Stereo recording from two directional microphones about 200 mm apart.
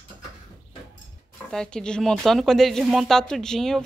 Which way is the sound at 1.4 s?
5° left (ahead or behind).